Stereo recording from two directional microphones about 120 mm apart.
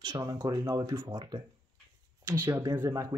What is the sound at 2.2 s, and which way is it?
Speech, 25° right (ahead or behind).